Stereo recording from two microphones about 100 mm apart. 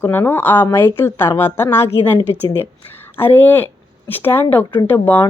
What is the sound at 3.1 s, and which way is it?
Speech, 20° left (ahead or behind).